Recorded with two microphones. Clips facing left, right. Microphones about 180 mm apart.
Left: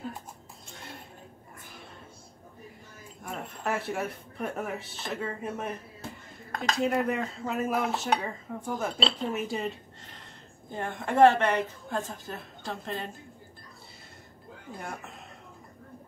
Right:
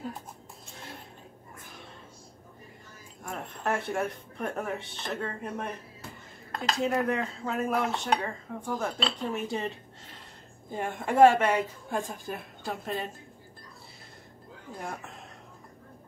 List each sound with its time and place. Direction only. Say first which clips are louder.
3.3 s speech: right 1 dB; centre (ahead or behind)
6.8 s speech: even; centre (ahead or behind)
10.7 s a woman's voice: right 1 dB; 10° right (ahead or behind)
14.8 s speech: right 2 dB; centre (ahead or behind)